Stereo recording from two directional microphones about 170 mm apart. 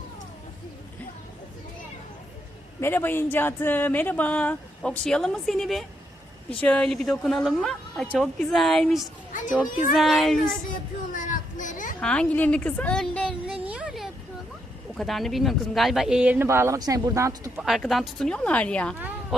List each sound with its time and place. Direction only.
2.8 s speech: 10° left (ahead or behind)
9.3 s a child's voice: 50° left (ahead or behind)
9.9 s speech: centre (ahead or behind)
11.1 s children playing: 50° left (ahead or behind)
11.9 s speech: 5° left (ahead or behind)
13.7 s a sound: 5° right (ahead or behind)
14.9 s speech: centre (ahead or behind); by 17.5 s 20° right (ahead or behind)
17.6 s speech: centre (ahead or behind)
18.9 s a sound: 10° right (ahead or behind)